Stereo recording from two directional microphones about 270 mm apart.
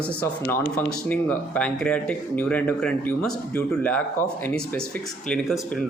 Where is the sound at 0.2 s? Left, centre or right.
Centre.